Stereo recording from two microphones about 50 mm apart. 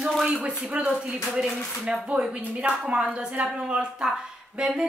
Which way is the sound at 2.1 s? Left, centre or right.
Right.